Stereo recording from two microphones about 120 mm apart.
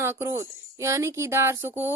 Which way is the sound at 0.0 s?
20° right (ahead or behind).